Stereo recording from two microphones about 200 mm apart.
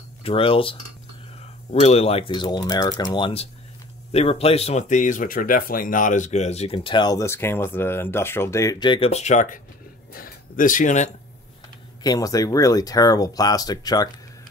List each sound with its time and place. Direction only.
0.2 s speech: 25° left (ahead or behind)
12.0 s speech: 20° left (ahead or behind)